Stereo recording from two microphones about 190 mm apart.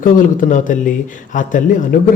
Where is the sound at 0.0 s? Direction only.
45° left (ahead or behind).